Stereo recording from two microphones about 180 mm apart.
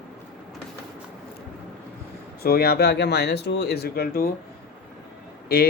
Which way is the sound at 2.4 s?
60° left (ahead or behind).